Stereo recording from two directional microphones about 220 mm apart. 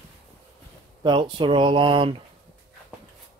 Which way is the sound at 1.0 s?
20° right (ahead or behind).